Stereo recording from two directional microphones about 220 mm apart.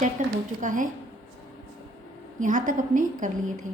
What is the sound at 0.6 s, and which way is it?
Speech, 35° right (ahead or behind).